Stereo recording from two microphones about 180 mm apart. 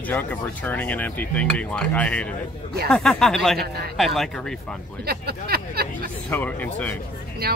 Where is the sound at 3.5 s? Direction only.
60° right (ahead or behind).